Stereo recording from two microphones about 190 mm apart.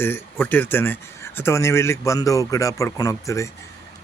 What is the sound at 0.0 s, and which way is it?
Speech, 10° left (ahead or behind).